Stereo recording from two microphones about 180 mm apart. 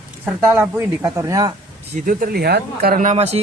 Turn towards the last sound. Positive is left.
turn(degrees=-35)  # may be behind; listen again after turning